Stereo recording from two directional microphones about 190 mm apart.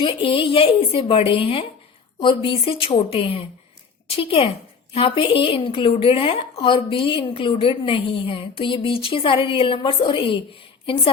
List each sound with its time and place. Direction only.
0.0 s a woman's voice: 25° left (ahead or behind)